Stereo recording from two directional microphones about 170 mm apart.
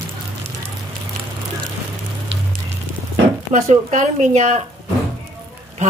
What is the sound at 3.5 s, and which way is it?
Speech, 45° right (ahead or behind).